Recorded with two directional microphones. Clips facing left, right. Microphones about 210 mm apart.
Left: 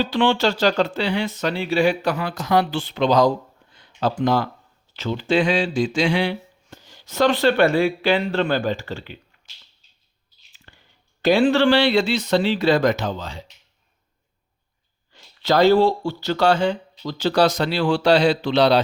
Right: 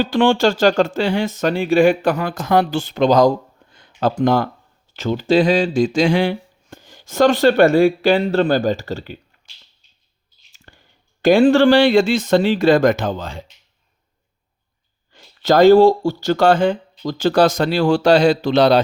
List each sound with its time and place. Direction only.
0.0 s speech: 50° right (ahead or behind)
10.7 s clicking: 45° right (ahead or behind)
11.2 s speech: 50° right (ahead or behind)
15.1 s speech: 45° right (ahead or behind)